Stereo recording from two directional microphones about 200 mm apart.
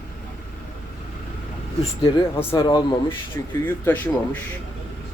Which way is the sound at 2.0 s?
25° left (ahead or behind).